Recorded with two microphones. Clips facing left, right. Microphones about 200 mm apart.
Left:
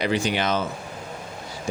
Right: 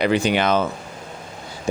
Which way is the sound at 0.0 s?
60° right (ahead or behind).